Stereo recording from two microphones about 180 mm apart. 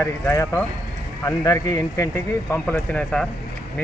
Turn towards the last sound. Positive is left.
turn(degrees=5)  # may be behind; listen again after turning